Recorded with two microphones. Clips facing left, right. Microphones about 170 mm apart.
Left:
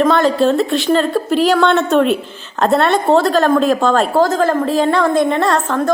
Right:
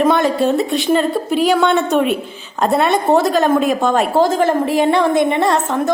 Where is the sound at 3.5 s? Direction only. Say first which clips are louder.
Left 2 dB; 5° right (ahead or behind).